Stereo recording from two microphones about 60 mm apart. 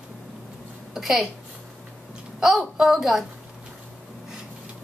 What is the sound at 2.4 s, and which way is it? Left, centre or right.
Speech, centre.